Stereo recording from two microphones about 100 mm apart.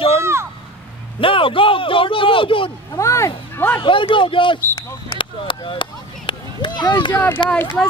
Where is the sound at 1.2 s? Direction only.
60° left (ahead or behind).